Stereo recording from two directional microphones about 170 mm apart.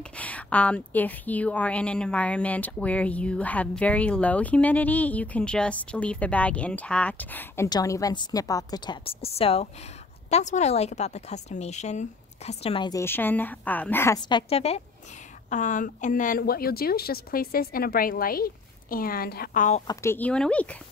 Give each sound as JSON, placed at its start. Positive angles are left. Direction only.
{"t": 0.0, "sound": "a woman's voice", "side_deg": 10}
{"t": 13.0, "sound": "a woman's voice", "side_deg": 10}
{"t": 14.3, "sound": "a woman's voice", "side_deg": 35}
{"t": 15.5, "sound": "a woman's voice", "side_deg": 50}
{"t": 19.9, "sound": "a woman's voice", "side_deg": 15}